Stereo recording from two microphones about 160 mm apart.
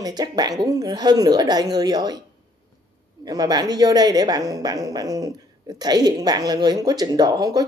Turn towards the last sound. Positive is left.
turn(degrees=-25)  # may be behind; listen again after turning